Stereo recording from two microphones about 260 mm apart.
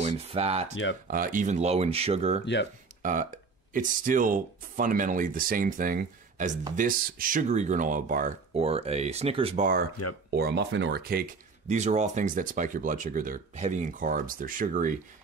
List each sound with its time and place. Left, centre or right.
0.0 s speech: right
2.4 s speech: left
3.0 s speech: right